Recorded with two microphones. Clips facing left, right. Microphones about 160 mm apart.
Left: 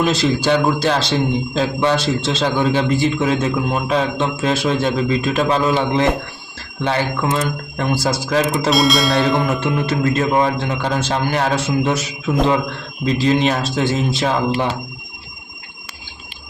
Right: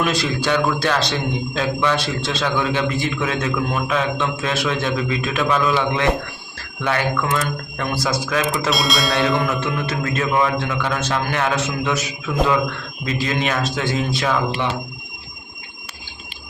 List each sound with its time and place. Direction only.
0.0 s a man's voice: 25° left (ahead or behind)
8.7 s bell: centre (ahead or behind)
9.5 s a man's voice: 30° left (ahead or behind)
13.1 s speech: 30° left (ahead or behind)